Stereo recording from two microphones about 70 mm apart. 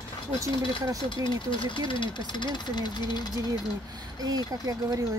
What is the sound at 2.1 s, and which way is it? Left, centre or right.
Speech, left.